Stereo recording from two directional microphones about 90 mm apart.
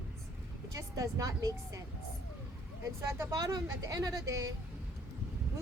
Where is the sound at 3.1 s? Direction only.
35° right (ahead or behind).